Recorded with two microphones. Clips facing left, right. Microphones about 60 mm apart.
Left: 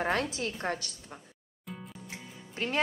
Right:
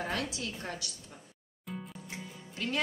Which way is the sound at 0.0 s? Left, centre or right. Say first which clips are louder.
Left 5 dB; left.